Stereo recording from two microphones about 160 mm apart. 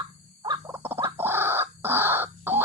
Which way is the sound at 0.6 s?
15° right (ahead or behind).